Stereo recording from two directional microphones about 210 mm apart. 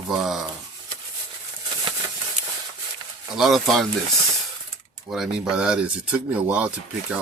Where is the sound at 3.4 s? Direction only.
Centre (ahead or behind).